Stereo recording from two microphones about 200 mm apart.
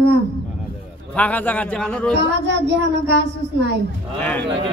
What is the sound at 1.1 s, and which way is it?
A man's voice, 5° left (ahead or behind).